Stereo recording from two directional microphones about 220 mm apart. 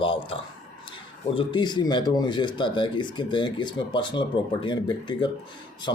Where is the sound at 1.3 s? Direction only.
25° left (ahead or behind).